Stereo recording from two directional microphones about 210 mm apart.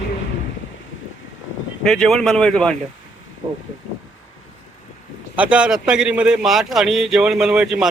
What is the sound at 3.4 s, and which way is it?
Speech, 20° right (ahead or behind).